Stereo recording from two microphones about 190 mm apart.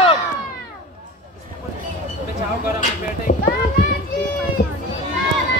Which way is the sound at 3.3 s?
50° left (ahead or behind).